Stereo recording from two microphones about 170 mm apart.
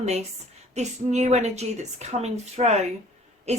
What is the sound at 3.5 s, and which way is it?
Hoot, 40° right (ahead or behind).